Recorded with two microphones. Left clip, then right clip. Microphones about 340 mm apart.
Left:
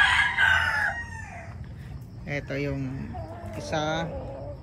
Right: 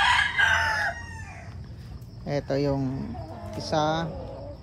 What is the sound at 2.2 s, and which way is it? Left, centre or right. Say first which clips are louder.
Speech: right 4 dB; centre.